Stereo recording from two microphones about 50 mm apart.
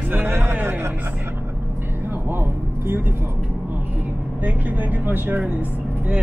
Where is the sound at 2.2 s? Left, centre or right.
Right.